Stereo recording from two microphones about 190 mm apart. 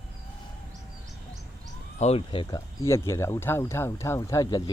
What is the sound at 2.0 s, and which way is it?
Speech, 30° left (ahead or behind).